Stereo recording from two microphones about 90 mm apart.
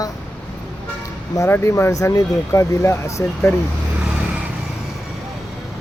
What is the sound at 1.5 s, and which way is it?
Speech, 30° left (ahead or behind).